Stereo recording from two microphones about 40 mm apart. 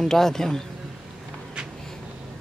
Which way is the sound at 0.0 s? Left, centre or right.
Centre.